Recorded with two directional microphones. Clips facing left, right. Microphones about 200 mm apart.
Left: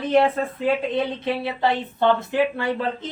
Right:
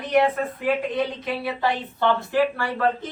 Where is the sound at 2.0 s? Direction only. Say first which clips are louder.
Left 1 dB; 20° left (ahead or behind).